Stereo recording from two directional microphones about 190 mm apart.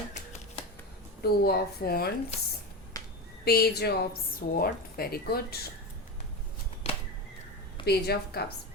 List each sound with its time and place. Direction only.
0.1 s finger snapping: 35° left (ahead or behind)
1.2 s a woman's voice: 55° left (ahead or behind)
2.9 s finger snapping: 20° left (ahead or behind)
3.4 s a woman's voice: 55° left (ahead or behind)
6.8 s a sound: 35° left (ahead or behind)
7.9 s a woman's voice: 55° left (ahead or behind)